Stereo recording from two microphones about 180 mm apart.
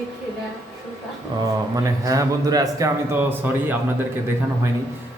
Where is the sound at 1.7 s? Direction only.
20° right (ahead or behind).